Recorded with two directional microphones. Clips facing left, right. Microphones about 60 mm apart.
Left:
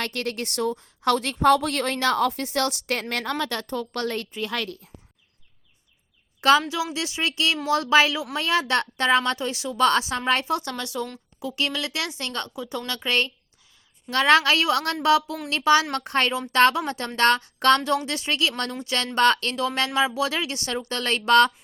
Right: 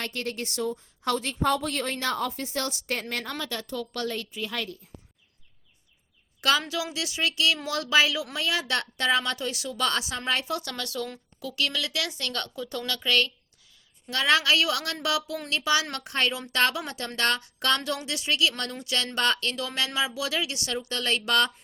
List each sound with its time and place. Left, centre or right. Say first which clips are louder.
0.0 s a woman's voice: left 4 dB; left
3.7 s speech: left 4 dB; left
6.4 s a woman's voice: left 6 dB; left
14.1 s a woman's voice: left 5 dB; left
19.1 s a woman's voice: left 8 dB; left